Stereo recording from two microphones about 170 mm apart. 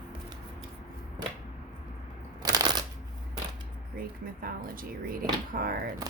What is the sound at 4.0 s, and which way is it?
A woman's voice, 60° right (ahead or behind).